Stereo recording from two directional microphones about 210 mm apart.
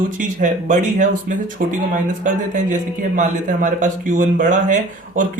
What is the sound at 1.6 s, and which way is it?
Speech, 45° right (ahead or behind).